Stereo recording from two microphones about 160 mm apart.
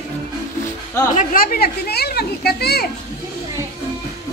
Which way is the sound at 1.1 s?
60° left (ahead or behind).